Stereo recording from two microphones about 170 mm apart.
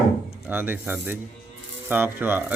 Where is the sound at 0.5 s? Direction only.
10° right (ahead or behind).